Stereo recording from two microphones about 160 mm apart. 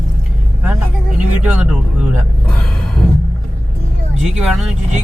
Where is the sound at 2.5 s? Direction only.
5° left (ahead or behind).